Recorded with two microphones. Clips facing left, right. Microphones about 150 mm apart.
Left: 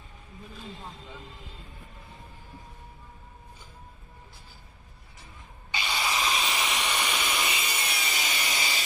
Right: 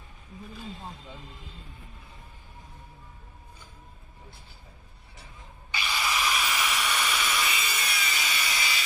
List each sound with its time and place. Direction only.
5.7 s hiss: 20° left (ahead or behind)